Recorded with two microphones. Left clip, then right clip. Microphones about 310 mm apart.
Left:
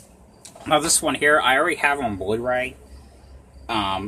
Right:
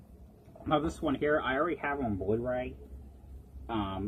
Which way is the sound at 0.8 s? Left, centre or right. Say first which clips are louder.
Left 12 dB; left.